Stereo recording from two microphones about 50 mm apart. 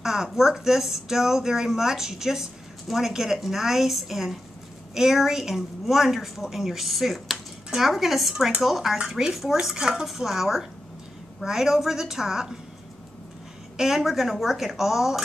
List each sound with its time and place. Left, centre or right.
0.0 s a woman's voice: centre
13.7 s a woman's voice: centre